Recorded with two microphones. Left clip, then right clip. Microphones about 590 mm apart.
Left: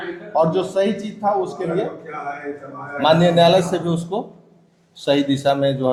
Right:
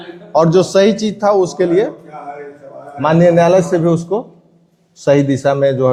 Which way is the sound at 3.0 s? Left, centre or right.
Right.